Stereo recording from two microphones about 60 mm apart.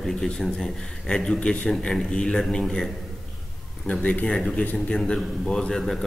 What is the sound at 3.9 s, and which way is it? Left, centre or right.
Speech, left.